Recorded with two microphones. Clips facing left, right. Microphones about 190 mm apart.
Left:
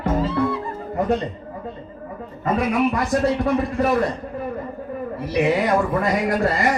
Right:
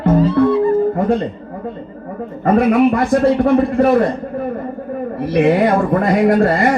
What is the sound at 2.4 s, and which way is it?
Speech, 55° right (ahead or behind).